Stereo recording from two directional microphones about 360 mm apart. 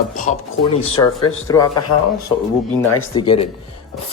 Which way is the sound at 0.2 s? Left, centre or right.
Centre.